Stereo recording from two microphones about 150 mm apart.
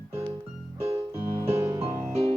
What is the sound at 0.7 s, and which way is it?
Keyboard, 40° right (ahead or behind).